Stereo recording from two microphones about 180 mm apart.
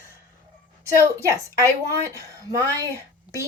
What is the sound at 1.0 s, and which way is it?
Speech, 15° right (ahead or behind).